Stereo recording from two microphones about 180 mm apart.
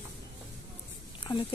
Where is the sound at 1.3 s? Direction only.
25° left (ahead or behind).